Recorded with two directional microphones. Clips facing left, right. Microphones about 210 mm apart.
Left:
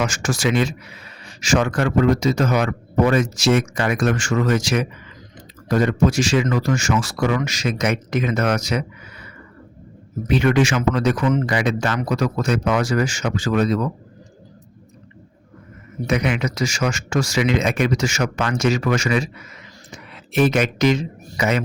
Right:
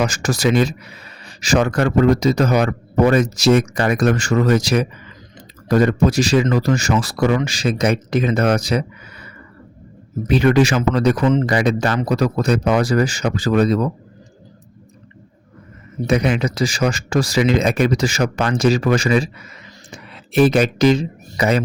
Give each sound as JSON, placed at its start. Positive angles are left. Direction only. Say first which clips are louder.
{"t": 0.0, "sound": "speech", "louder": "right 3 dB", "side_deg": -35}
{"t": 10.2, "sound": "speech", "louder": "right 3 dB", "side_deg": -35}
{"t": 16.0, "sound": "speech", "louder": "right 3 dB", "side_deg": -30}